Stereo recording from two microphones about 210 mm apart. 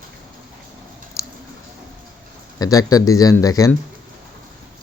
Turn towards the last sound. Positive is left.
turn(degrees=15)  # may be behind; listen again after turning